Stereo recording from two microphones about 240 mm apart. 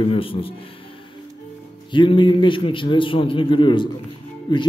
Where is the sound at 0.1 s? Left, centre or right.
Left.